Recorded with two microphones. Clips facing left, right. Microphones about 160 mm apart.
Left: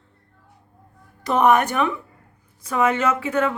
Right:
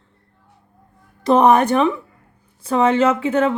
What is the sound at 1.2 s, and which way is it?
A woman's voice, 30° right (ahead or behind).